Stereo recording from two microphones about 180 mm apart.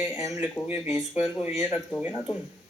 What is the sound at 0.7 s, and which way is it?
A man's voice, 5° right (ahead or behind).